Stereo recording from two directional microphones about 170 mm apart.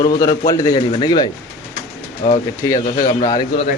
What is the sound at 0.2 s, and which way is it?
A man's voice, 20° left (ahead or behind).